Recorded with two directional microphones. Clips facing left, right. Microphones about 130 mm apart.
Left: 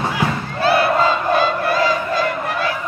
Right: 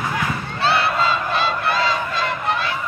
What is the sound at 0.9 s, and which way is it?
Battle cry, 25° left (ahead or behind).